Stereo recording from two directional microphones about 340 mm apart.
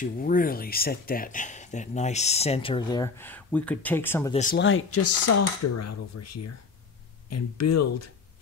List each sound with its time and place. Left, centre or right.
0.0 s speech: left; by 4.4 s centre
4.4 s speech: left